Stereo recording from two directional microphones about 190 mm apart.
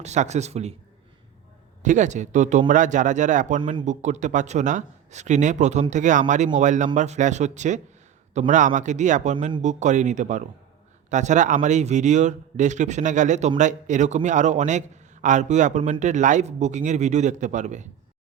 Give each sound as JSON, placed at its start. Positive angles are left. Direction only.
{"t": 0.0, "sound": "a man's voice", "side_deg": -35}
{"t": 1.8, "sound": "a man's voice", "side_deg": -40}